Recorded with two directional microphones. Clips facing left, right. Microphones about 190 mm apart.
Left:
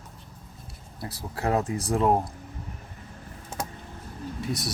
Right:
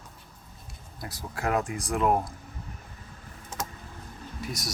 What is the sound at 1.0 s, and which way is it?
Speech, 30° left (ahead or behind).